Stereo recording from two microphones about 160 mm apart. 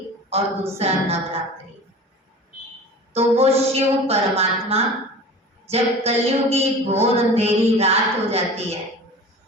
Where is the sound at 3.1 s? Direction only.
40° right (ahead or behind).